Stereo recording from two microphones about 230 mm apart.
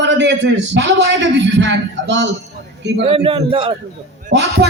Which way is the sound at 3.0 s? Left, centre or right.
Right.